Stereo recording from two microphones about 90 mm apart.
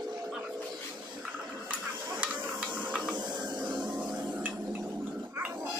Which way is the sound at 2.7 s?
15° right (ahead or behind).